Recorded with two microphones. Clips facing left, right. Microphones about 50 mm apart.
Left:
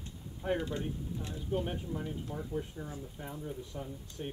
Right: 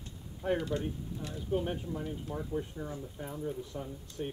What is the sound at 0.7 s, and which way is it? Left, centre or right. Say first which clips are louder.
Speech: right 2 dB; centre.